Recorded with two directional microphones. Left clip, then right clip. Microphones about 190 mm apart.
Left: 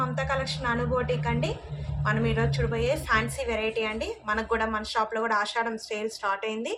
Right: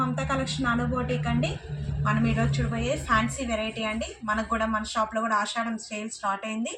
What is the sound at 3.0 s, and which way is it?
Speech, 60° left (ahead or behind).